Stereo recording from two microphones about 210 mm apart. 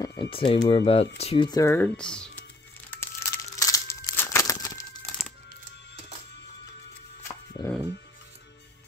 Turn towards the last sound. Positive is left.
turn(degrees=20)  # may be behind; listen again after turning